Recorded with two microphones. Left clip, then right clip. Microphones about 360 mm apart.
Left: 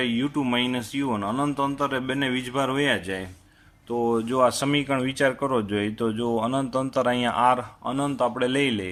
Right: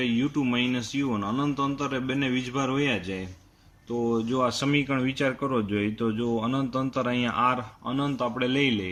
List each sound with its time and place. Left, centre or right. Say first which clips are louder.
0.0 s speech: left 1 dB; centre
3.9 s speech: left 3 dB; left
4.3 s a man's voice: left 6 dB; centre